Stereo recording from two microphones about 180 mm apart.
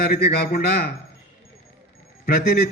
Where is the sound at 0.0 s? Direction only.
60° left (ahead or behind).